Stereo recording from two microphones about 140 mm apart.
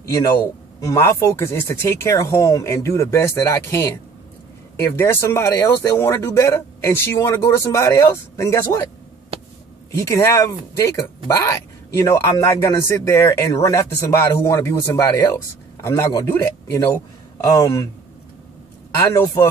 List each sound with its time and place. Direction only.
0.1 s speech: 20° left (ahead or behind)
9.9 s speech: 20° left (ahead or behind)
18.9 s speech: 20° left (ahead or behind)